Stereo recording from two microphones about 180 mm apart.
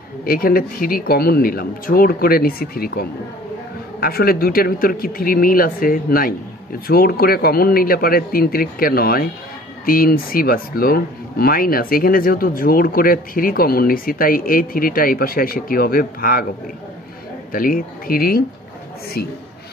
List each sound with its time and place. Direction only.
0.2 s speech: 55° left (ahead or behind)
17.5 s speech: 50° left (ahead or behind)